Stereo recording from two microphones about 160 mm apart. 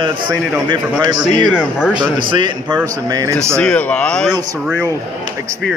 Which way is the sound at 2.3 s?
30° right (ahead or behind).